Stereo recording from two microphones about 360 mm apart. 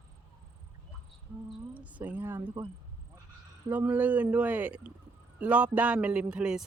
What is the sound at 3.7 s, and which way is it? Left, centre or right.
Speech, centre.